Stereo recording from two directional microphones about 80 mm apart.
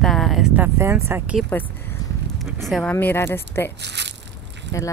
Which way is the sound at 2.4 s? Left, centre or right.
Centre.